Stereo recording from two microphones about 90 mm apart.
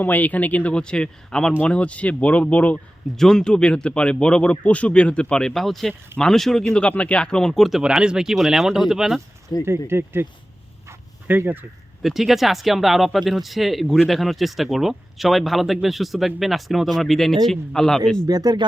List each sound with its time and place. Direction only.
0.0 s speech: 20° left (ahead or behind)
3.2 s speech: 5° left (ahead or behind)
9.6 s speech: 25° right (ahead or behind)
10.8 s dog: 25° right (ahead or behind)
12.0 s speech: 5° right (ahead or behind)
18.3 s speech: 45° right (ahead or behind)